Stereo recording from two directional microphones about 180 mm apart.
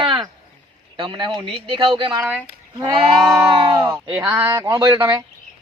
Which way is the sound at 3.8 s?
20° right (ahead or behind).